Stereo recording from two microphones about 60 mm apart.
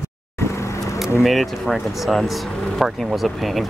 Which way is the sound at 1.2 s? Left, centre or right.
Centre.